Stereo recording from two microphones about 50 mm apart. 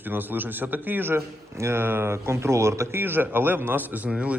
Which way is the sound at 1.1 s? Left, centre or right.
Right.